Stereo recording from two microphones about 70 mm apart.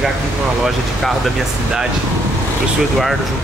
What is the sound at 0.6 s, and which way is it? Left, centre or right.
Speech, centre.